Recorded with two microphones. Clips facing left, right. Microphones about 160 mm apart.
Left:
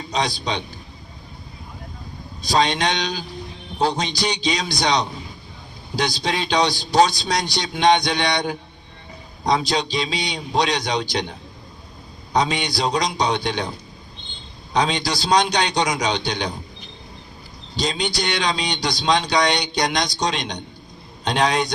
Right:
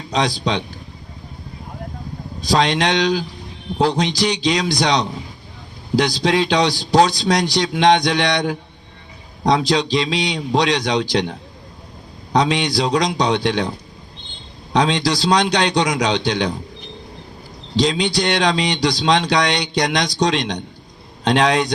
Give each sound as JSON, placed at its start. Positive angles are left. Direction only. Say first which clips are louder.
{"t": 0.1, "sound": "speech", "louder": "right 4 dB", "side_deg": -90}
{"t": 2.4, "sound": "speech", "louder": "right 3 dB", "side_deg": -90}
{"t": 6.2, "sound": "speech", "louder": "right 2 dB", "side_deg": -90}
{"t": 14.7, "sound": "speech", "louder": "right 4 dB", "side_deg": -85}
{"t": 17.7, "sound": "speech", "louder": "right 6 dB", "side_deg": -90}